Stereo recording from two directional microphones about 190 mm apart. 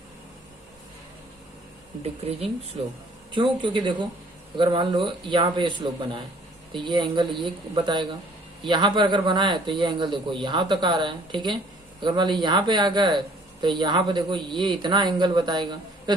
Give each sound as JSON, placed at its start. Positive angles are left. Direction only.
{"t": 2.8, "sound": "speech", "side_deg": -30}